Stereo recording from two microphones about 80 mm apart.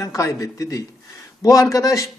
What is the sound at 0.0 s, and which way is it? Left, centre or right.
A man's voice, left.